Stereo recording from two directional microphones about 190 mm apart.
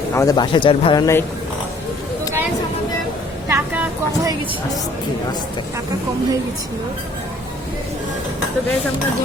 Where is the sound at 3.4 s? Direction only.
10° right (ahead or behind).